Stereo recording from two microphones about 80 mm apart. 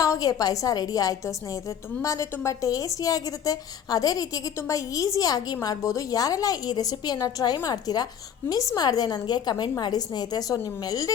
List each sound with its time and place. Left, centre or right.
0.0 s a woman's voice: left
2.0 s a woman's voice: left